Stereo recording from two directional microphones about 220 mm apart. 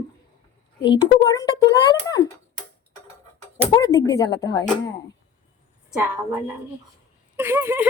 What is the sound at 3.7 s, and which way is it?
Speech, 15° left (ahead or behind).